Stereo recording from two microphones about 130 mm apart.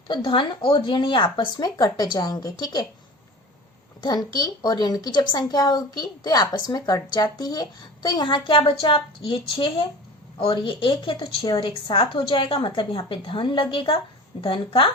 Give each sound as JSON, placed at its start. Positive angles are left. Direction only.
{"t": 0.1, "sound": "a woman's voice", "side_deg": 40}
{"t": 4.0, "sound": "a woman's voice", "side_deg": 30}